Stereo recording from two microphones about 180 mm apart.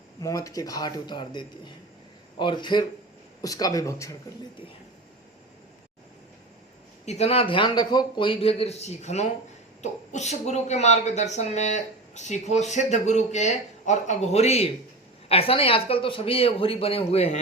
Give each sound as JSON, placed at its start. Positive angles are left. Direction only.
{"t": 0.2, "sound": "speech", "side_deg": 20}
{"t": 7.0, "sound": "speech", "side_deg": 35}